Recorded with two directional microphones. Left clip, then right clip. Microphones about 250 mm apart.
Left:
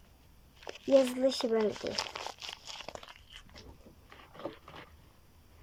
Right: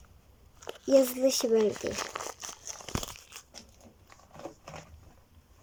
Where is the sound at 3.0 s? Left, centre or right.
Right.